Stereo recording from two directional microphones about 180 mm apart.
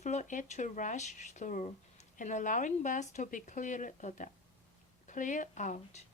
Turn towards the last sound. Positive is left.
turn(degrees=40)  # may be behind; listen again after turning